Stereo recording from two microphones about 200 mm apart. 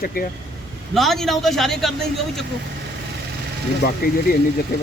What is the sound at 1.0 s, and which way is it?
Speech, centre (ahead or behind).